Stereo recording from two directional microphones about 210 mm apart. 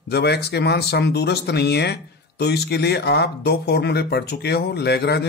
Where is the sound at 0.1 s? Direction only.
50° left (ahead or behind).